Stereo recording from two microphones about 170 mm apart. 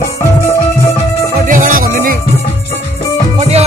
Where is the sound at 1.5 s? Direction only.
50° right (ahead or behind).